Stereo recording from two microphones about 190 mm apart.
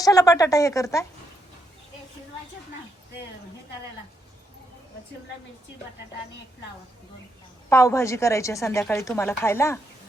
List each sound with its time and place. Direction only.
0.0 s a woman's voice: 20° left (ahead or behind)
7.7 s a woman's voice: 15° left (ahead or behind)